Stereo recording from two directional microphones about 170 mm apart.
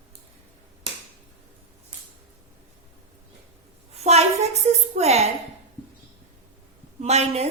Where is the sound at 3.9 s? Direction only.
40° right (ahead or behind).